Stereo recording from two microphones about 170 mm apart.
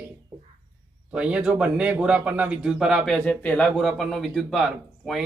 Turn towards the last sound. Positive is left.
turn(degrees=0)  # may be behind; listen again after turning